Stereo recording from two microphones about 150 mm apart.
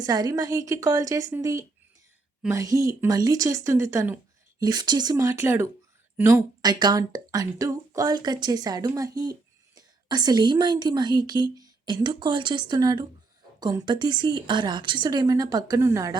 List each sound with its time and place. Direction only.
0.0 s speech: 25° right (ahead or behind)
6.6 s speech: 25° right (ahead or behind)